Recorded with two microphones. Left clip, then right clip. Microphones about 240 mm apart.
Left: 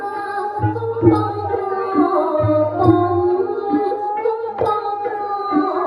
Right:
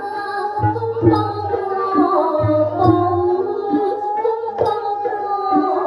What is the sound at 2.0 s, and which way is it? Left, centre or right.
Music, right.